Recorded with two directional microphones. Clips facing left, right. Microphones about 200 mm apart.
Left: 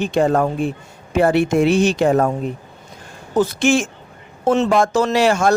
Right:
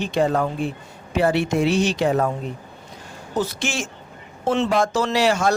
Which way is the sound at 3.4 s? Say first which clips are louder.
Left 9 dB; 55° left (ahead or behind).